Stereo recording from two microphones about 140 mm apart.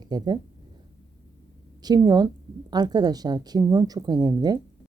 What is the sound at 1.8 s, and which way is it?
Speech, 30° right (ahead or behind).